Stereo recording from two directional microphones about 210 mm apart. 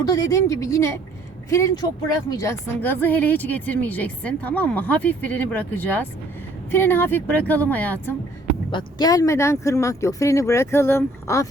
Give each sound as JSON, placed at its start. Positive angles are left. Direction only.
{"t": 0.1, "sound": "speech", "side_deg": 15}